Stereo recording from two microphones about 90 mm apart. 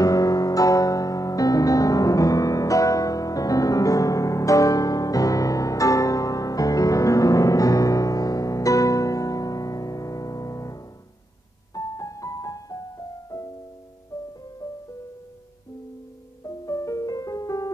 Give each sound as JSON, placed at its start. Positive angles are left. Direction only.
{"t": 0.0, "sound": "music", "side_deg": 40}
{"t": 16.4, "sound": "music", "side_deg": 40}